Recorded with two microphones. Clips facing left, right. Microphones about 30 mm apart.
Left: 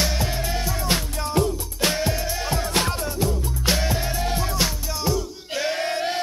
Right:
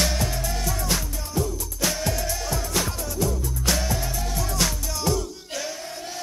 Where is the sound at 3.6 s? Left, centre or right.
Left.